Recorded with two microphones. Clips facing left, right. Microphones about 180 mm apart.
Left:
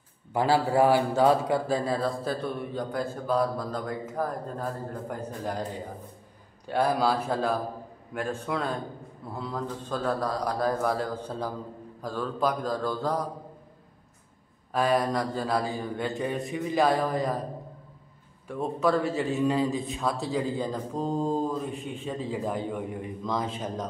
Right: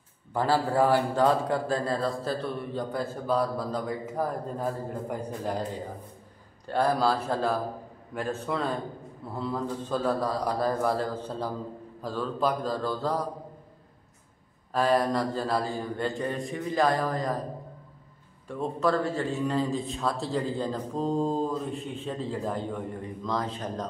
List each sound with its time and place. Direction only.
0.3 s a man's voice: 10° left (ahead or behind); by 5.6 s 5° right (ahead or behind)
6.7 s a man's voice: 5° left (ahead or behind)
14.7 s a man's voice: 5° left (ahead or behind)
18.5 s speech: 5° left (ahead or behind)
19.9 s a man's voice: centre (ahead or behind); by 23.5 s 15° left (ahead or behind)